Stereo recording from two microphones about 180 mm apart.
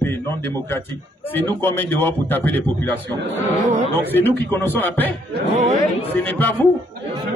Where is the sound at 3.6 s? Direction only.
35° right (ahead or behind).